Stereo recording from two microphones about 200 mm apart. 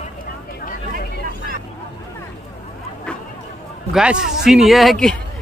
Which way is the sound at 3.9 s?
5° right (ahead or behind).